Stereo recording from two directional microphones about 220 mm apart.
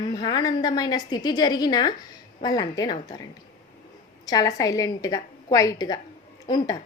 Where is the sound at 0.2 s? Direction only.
20° left (ahead or behind).